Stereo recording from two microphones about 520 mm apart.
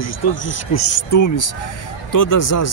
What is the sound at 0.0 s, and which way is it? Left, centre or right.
Speech, left.